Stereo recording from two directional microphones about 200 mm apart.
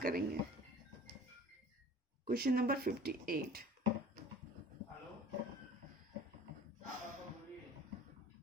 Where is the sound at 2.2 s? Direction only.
45° right (ahead or behind).